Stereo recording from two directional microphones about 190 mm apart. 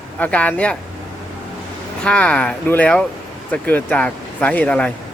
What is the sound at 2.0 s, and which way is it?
Speech, 5° left (ahead or behind).